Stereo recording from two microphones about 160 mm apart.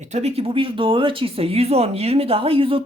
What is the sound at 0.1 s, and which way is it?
Speech, 40° right (ahead or behind).